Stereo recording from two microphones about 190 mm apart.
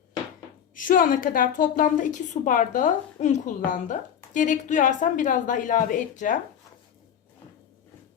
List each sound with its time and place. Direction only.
0.8 s a woman's voice: 45° left (ahead or behind)